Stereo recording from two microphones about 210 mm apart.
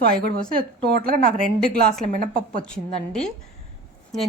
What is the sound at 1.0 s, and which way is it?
A woman's voice, 45° right (ahead or behind).